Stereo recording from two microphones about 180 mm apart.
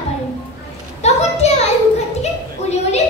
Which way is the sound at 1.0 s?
40° left (ahead or behind).